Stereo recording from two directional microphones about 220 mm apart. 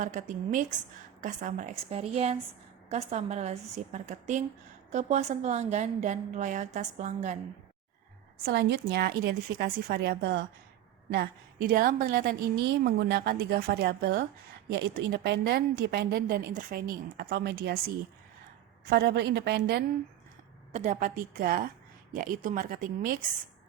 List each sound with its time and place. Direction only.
0.0 s a woman's voice: 35° right (ahead or behind)
8.4 s a woman's voice: 50° right (ahead or behind)
20.7 s a woman's voice: 35° right (ahead or behind)